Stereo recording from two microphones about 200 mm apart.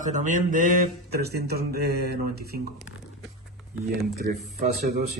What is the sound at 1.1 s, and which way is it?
Speech, 55° right (ahead or behind).